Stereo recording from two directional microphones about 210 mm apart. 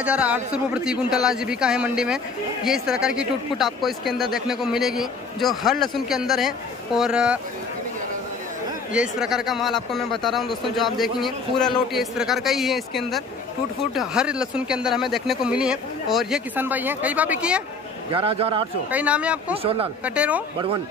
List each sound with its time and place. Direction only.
0.0 s speech: 5° right (ahead or behind)
8.9 s speech: 5° right (ahead or behind)
18.1 s a man's voice: 25° right (ahead or behind)
18.9 s speech: 5° right (ahead or behind)
19.5 s a man's voice: 25° right (ahead or behind)
20.2 s speech: 5° right (ahead or behind)